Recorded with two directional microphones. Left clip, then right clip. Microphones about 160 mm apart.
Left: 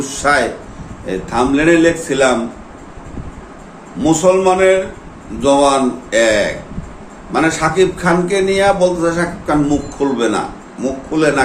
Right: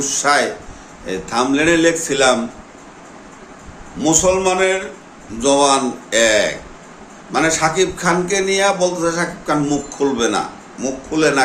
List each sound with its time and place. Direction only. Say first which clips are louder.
0.0 s a man's voice: left 1 dB; 15° right (ahead or behind)
4.0 s a man's voice: left 3 dB; 20° right (ahead or behind)